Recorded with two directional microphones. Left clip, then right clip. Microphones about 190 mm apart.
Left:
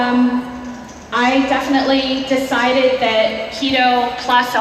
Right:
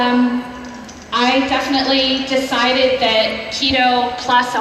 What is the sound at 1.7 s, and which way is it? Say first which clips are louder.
A woman's voice: even; 15° left (ahead or behind).